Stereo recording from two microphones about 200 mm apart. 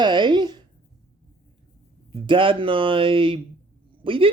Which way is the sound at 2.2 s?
25° right (ahead or behind).